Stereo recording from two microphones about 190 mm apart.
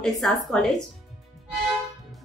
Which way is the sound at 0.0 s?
Centre (ahead or behind).